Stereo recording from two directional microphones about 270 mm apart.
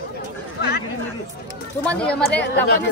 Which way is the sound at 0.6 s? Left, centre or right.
Left.